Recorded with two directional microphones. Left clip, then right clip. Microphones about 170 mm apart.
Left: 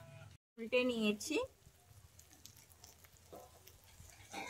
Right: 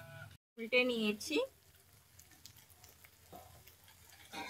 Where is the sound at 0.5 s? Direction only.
35° left (ahead or behind).